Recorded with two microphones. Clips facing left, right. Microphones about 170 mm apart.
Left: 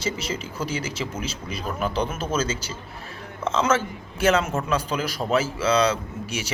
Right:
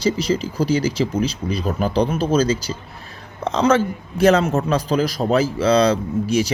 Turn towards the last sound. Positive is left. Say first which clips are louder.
# right 12 dB
turn(degrees=-35)  # may be behind; listen again after turning